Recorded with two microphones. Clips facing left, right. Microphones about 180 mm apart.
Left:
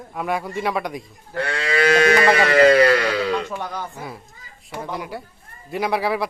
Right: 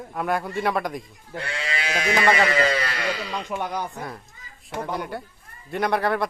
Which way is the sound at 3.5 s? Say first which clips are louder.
Right 1 dB; 15° right (ahead or behind).